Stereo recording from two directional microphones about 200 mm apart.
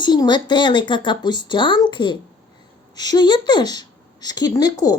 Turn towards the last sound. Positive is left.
turn(degrees=20)  # may be behind; listen again after turning